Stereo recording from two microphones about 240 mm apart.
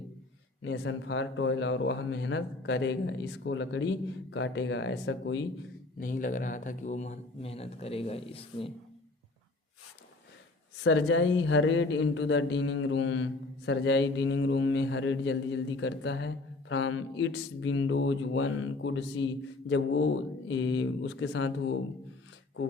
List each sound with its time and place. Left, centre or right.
0.6 s speech: left
6.0 s speech: left
10.8 s speech: left